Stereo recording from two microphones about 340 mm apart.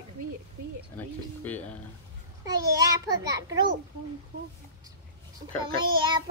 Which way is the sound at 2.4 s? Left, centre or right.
Centre.